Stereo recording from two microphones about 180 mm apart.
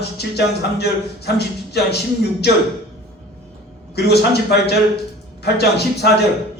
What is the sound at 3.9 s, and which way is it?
A man's voice, 65° left (ahead or behind).